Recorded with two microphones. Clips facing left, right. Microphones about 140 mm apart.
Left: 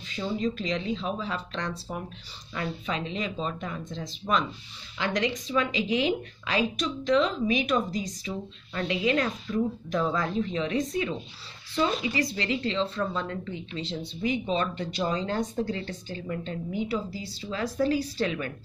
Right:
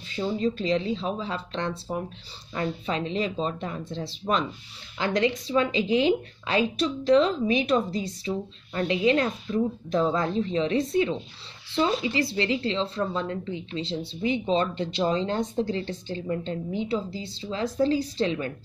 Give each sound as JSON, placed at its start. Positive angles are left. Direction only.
{"t": 0.1, "sound": "speech", "side_deg": -35}